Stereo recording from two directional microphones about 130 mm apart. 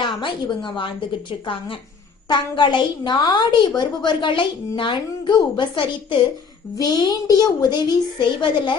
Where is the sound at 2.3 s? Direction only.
35° left (ahead or behind).